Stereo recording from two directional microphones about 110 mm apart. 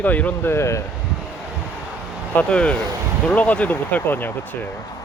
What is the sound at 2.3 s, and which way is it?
Speech, 10° left (ahead or behind).